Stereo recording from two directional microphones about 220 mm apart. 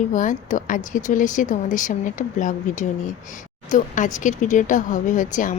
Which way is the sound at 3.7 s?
35° left (ahead or behind).